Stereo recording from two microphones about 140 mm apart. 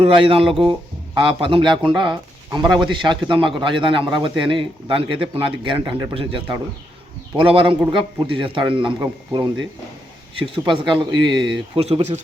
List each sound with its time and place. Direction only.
0.0 s a man's voice: 40° right (ahead or behind)
2.6 s a man's voice: centre (ahead or behind)
2.9 s a man's voice: 35° right (ahead or behind)
5.8 s speech: 25° right (ahead or behind)
7.3 s a man's voice: 40° right (ahead or behind)
11.8 s speech: 45° right (ahead or behind)